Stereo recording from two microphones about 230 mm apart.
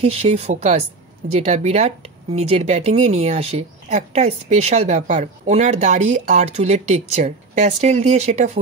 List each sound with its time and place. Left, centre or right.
0.0 s speech: right